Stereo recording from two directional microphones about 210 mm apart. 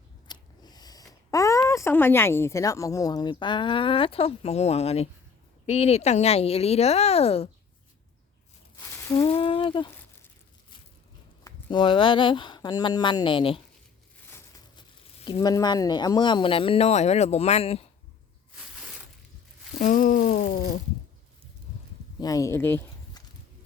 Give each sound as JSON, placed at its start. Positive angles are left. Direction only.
{"t": 0.3, "sound": "speech", "side_deg": 20}
{"t": 9.1, "sound": "speech", "side_deg": 25}
{"t": 11.4, "sound": "speech", "side_deg": 20}
{"t": 14.3, "sound": "crushing", "side_deg": 10}
{"t": 15.2, "sound": "speech", "side_deg": 20}
{"t": 19.8, "sound": "speech", "side_deg": 40}
{"t": 22.2, "sound": "speech", "side_deg": 15}